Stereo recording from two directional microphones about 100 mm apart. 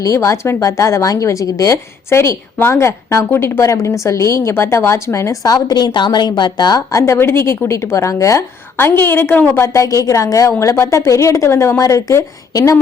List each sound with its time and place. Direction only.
0.0 s a woman's voice: 30° left (ahead or behind)
7.0 s a woman's voice: 25° left (ahead or behind)